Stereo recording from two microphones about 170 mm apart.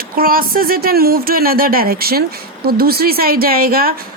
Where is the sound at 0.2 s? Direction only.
60° right (ahead or behind).